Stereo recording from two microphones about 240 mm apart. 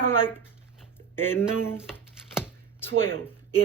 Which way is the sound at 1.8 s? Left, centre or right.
Centre.